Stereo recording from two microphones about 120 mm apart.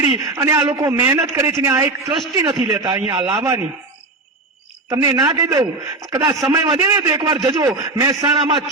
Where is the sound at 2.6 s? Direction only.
40° right (ahead or behind).